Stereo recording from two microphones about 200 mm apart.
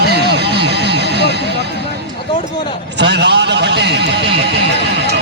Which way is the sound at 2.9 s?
60° right (ahead or behind).